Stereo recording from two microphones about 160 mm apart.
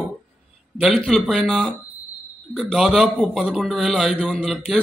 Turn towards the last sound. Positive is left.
turn(degrees=0)  # may be behind; listen again after turning